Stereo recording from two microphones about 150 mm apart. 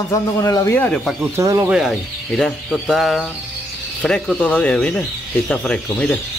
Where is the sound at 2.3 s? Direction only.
5° left (ahead or behind).